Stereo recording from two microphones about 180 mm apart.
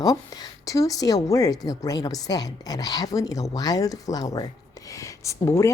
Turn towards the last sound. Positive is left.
turn(degrees=15)  # may be behind; listen again after turning